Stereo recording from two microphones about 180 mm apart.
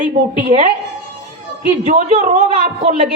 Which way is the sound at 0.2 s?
40° right (ahead or behind).